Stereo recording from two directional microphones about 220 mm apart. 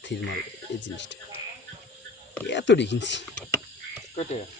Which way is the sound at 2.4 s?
55° left (ahead or behind).